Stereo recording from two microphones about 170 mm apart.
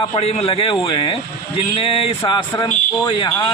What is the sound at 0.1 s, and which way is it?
A man's voice, 40° left (ahead or behind).